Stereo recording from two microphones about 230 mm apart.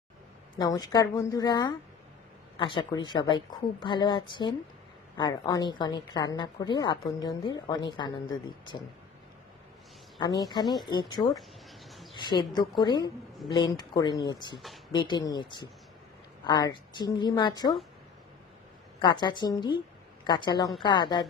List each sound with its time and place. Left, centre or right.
0.6 s a woman's voice: centre
10.2 s a woman's voice: centre
18.9 s a woman's voice: centre